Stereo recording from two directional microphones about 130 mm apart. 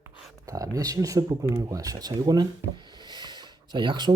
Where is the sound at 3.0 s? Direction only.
35° right (ahead or behind).